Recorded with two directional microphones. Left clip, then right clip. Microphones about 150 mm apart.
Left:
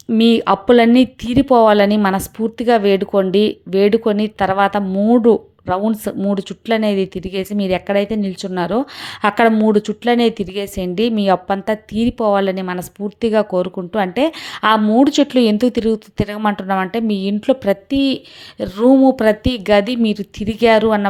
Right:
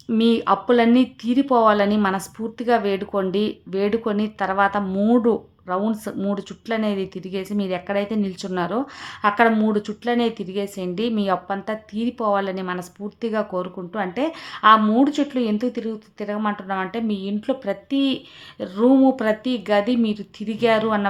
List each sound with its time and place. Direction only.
0.2 s a woman's voice: 35° left (ahead or behind)
18.9 s speech: 15° left (ahead or behind)
19.1 s a woman's voice: 40° left (ahead or behind)